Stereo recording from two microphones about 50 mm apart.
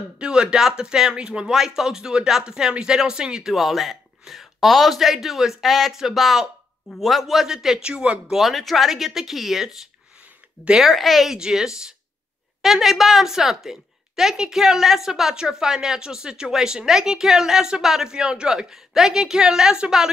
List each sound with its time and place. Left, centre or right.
0.2 s a woman's voice: centre
7.8 s speech: right
8.3 s speech: centre
11.3 s a woman's voice: centre